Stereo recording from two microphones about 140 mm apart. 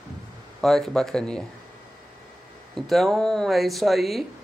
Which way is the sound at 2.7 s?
Centre (ahead or behind).